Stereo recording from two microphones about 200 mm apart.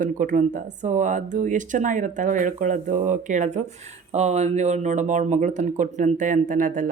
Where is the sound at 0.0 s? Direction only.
40° right (ahead or behind).